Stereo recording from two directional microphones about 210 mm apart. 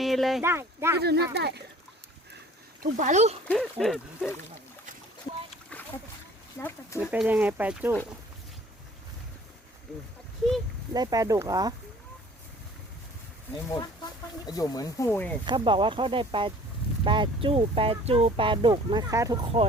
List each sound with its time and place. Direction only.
0.0 s speech: centre (ahead or behind)
0.4 s speech: 10° right (ahead or behind)
0.9 s speech: 50° right (ahead or behind)
2.8 s speech: 35° right (ahead or behind)
3.5 s speech: centre (ahead or behind)
5.7 s splash: 5° left (ahead or behind)
6.6 s speech: 10° left (ahead or behind)
7.0 s speech: 5° right (ahead or behind)
10.9 s speech: 15° right (ahead or behind)
14.5 s speech: 15° left (ahead or behind)
15.4 s speech: 20° right (ahead or behind)
19.6 s speech: 25° right (ahead or behind)